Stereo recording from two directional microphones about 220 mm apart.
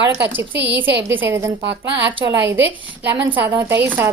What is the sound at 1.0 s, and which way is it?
Speech, 10° right (ahead or behind).